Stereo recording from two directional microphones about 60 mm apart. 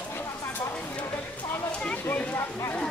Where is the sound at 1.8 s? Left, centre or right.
Left.